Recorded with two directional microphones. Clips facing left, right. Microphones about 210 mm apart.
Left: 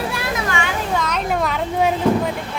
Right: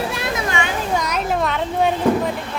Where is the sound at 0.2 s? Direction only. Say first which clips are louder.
Right 1 dB; 15° right (ahead or behind).